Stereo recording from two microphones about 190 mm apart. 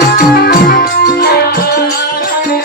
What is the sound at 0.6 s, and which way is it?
Music, 50° left (ahead or behind).